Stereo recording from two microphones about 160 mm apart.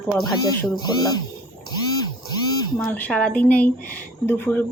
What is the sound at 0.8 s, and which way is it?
Speech, 25° left (ahead or behind).